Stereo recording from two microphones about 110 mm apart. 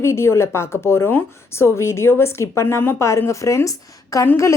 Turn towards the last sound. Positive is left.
turn(degrees=30)  # may be behind; listen again after turning